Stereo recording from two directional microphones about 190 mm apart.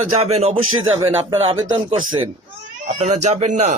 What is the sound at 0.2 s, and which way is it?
Speech, 35° right (ahead or behind).